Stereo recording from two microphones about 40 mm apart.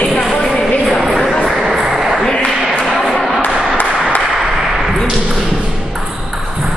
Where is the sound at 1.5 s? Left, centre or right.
Centre.